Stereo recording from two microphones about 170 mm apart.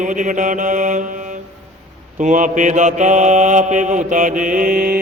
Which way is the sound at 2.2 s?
45° right (ahead or behind).